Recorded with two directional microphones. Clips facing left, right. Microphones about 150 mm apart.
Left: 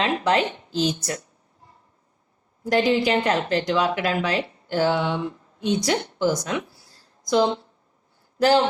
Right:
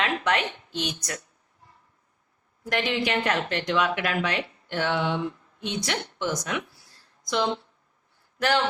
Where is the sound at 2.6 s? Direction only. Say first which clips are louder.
Left 7 dB; 35° left (ahead or behind).